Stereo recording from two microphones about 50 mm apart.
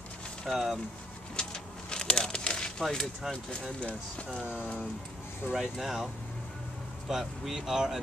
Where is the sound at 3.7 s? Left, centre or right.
Left.